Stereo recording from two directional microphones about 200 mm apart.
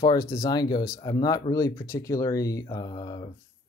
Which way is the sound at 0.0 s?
20° left (ahead or behind).